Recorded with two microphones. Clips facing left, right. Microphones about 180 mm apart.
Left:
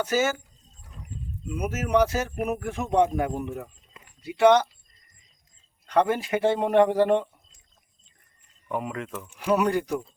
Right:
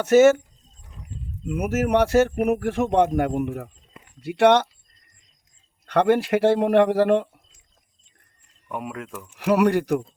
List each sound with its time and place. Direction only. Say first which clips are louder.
0.2 s speech: right 15 dB; 70° right (ahead or behind)
1.5 s speech: right 6 dB; 60° right (ahead or behind)
5.8 s speech: right 4 dB; 70° right (ahead or behind)
8.7 s speech: left 1 dB; 5° right (ahead or behind)
9.3 s speech: right 4 dB; 70° right (ahead or behind)